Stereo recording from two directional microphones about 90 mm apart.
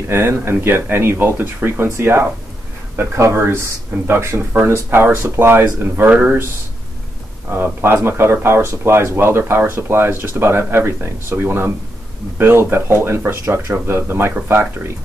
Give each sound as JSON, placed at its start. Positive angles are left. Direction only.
{"t": 0.1, "sound": "speech", "side_deg": -25}
{"t": 7.5, "sound": "speech", "side_deg": -25}